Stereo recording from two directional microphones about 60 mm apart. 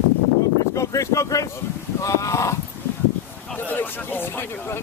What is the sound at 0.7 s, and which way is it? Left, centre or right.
Speech, left.